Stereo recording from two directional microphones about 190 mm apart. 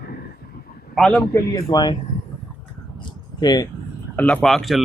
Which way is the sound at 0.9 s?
5° left (ahead or behind).